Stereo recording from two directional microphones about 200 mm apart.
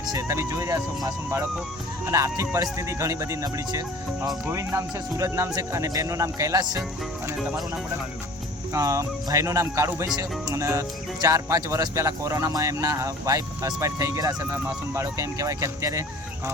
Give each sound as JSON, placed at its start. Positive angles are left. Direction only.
{"t": 0.0, "sound": "speech", "side_deg": -15}
{"t": 8.7, "sound": "speech", "side_deg": -15}